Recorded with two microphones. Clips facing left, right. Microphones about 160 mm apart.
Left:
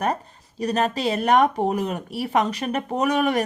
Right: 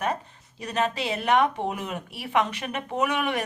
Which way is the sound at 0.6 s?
40° left (ahead or behind).